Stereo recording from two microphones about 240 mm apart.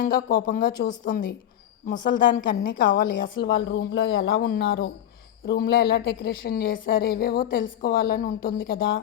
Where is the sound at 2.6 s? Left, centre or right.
Left.